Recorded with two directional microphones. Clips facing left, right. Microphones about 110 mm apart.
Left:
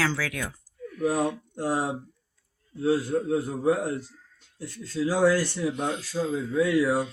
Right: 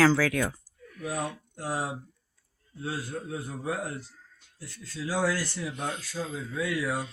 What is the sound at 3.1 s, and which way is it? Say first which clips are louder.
Speech: left 10 dB; 40° left (ahead or behind).